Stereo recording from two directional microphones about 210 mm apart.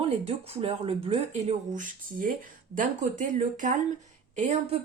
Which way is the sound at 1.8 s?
40° right (ahead or behind).